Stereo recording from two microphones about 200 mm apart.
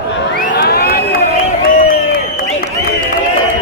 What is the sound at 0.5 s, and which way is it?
Crowd, 50° left (ahead or behind).